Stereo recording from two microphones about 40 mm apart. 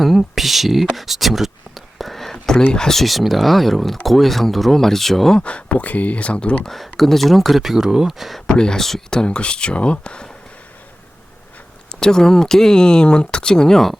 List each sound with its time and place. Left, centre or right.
0.0 s speech: centre
3.0 s speech: centre
5.4 s speech: left
6.7 s speech: centre
8.4 s speech: left
11.9 s speech: centre